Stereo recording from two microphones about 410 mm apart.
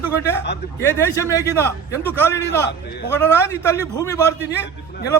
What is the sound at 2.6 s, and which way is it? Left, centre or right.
Speech, left.